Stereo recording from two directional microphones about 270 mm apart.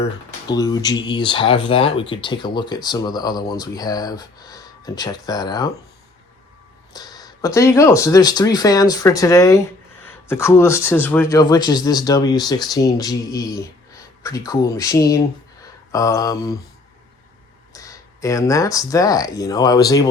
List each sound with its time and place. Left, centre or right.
0.0 s speech: centre
6.9 s speech: centre
17.7 s speech: centre